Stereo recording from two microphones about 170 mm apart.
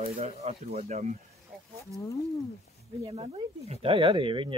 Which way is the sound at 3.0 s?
35° right (ahead or behind).